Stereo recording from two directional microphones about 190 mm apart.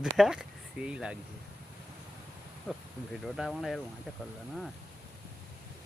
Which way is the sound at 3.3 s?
Centre (ahead or behind).